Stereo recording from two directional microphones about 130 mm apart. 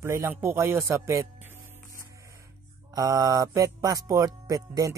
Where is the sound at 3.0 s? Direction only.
25° right (ahead or behind).